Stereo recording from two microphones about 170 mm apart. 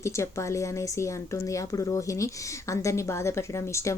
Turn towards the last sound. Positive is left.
turn(degrees=15)  # may be behind; listen again after turning